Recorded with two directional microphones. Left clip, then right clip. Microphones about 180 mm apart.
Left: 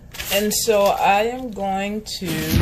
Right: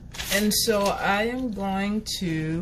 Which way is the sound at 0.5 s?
20° right (ahead or behind).